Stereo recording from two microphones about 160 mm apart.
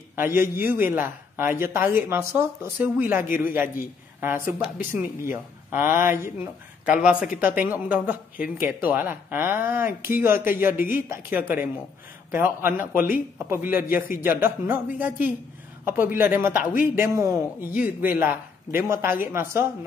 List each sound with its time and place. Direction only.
0.1 s a man's voice: 15° right (ahead or behind)